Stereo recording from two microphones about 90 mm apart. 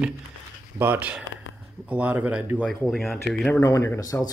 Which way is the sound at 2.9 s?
Centre (ahead or behind).